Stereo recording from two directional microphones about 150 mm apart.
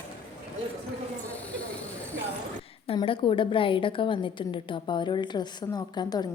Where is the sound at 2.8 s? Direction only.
35° left (ahead or behind).